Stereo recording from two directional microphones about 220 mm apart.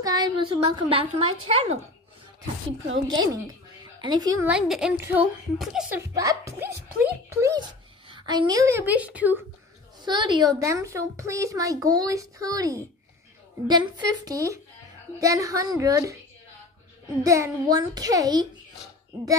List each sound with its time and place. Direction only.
0.0 s a woman's voice: 20° right (ahead or behind)
3.1 s a woman's voice: 20° right (ahead or behind)
4.5 s a child's voice: 5° right (ahead or behind)
6.1 s a woman's voice: 15° right (ahead or behind)
10.0 s a woman's voice: 20° right (ahead or behind)
17.2 s a woman's voice: 15° right (ahead or behind)